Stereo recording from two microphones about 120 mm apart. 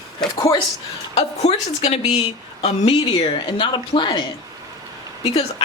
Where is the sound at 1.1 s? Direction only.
60° left (ahead or behind); by 4.3 s 40° left (ahead or behind).